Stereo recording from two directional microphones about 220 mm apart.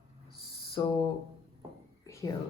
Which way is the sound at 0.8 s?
20° left (ahead or behind).